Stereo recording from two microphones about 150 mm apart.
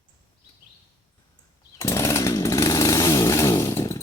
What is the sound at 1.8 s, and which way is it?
Chainsaw, 20° left (ahead or behind).